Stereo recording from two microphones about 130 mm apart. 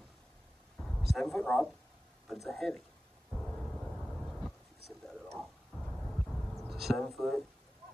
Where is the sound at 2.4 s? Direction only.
Centre (ahead or behind).